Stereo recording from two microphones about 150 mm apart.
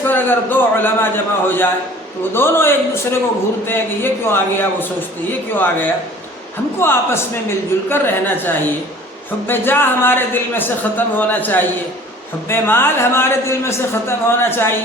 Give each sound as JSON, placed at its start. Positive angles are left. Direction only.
{"t": 0.0, "sound": "speech", "side_deg": 15}